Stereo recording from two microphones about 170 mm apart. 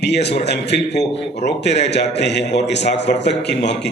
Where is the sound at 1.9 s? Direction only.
85° left.